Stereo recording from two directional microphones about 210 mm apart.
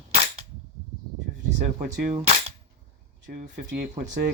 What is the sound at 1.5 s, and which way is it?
Speech, 35° right (ahead or behind).